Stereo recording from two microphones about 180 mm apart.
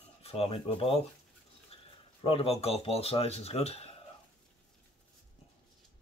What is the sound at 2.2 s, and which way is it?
Speech, 35° left (ahead or behind).